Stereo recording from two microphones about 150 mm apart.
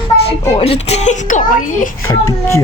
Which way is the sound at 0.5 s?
40° left (ahead or behind).